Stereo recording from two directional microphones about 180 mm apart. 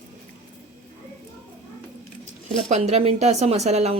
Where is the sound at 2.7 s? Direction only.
35° right (ahead or behind).